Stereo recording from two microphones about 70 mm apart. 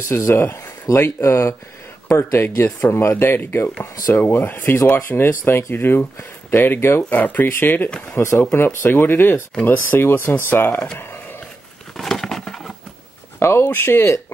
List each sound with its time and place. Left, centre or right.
0.1 s speech: left
0.9 s speech: left
1.2 s speech: left
7.1 s speech: left
12.0 s a sound: centre
13.4 s speech: left